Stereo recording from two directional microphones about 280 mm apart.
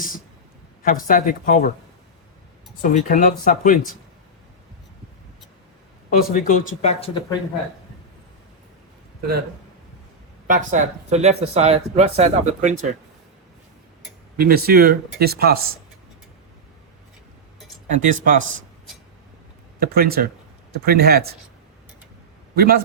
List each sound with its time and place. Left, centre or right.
0.8 s speech: left
2.8 s speech: left
6.1 s speech: left
10.4 s speech: right
14.3 s speech: right
17.8 s speech: right
19.8 s speech: right
22.5 s speech: right